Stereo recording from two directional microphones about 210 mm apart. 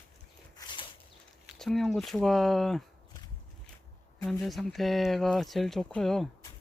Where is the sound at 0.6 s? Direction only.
20° left (ahead or behind).